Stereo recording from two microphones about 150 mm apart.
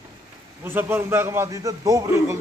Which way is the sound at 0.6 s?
15° right (ahead or behind).